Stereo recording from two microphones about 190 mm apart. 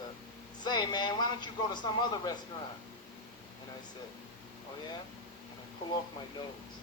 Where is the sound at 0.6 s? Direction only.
20° left (ahead or behind).